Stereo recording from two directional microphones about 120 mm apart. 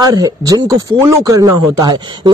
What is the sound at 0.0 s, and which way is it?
Speech, 30° right (ahead or behind).